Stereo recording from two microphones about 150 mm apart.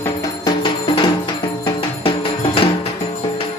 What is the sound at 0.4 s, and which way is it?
Music, 30° left (ahead or behind).